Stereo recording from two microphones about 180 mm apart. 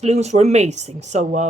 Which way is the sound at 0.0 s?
35° right (ahead or behind).